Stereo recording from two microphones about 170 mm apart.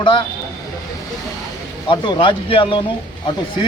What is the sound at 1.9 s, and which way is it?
Speech, 25° left (ahead or behind).